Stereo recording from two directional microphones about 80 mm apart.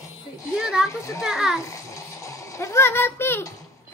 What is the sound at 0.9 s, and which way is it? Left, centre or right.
Speech, left.